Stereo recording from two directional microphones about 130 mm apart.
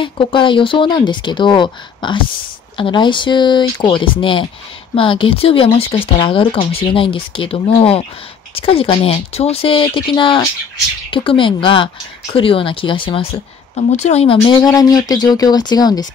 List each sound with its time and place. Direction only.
0.0 s speech: 40° left (ahead or behind)
13.7 s speech: 60° left (ahead or behind)
14.4 s speech: 30° left (ahead or behind)